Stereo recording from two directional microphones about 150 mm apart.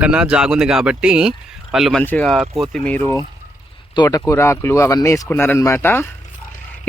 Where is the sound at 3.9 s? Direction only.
25° left (ahead or behind).